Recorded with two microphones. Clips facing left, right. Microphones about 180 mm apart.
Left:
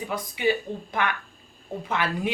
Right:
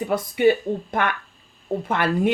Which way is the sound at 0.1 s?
55° right (ahead or behind).